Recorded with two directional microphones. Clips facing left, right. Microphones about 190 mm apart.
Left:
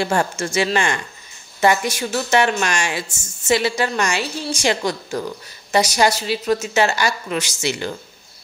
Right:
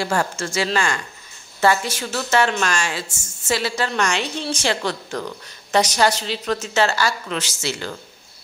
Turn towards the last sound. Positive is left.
turn(degrees=15)  # may be behind; listen again after turning